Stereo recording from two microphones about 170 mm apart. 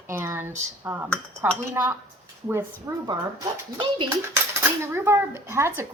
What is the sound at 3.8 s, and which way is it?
Speech, 30° right (ahead or behind).